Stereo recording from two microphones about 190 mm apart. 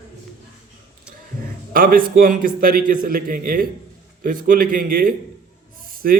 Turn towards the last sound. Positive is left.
turn(degrees=-50)  # may be behind; listen again after turning